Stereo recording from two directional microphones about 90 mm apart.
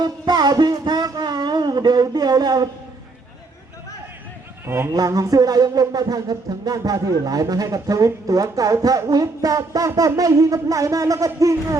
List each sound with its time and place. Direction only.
0.0 s a sound: 50° right (ahead or behind)
4.6 s speech: 25° right (ahead or behind)
4.9 s music: 40° right (ahead or behind)